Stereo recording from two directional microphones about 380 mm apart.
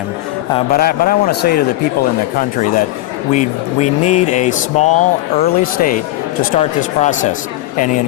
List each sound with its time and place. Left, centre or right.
0.5 s speech: left